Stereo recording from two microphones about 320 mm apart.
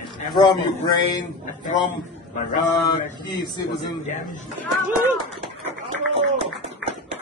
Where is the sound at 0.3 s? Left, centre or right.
Centre.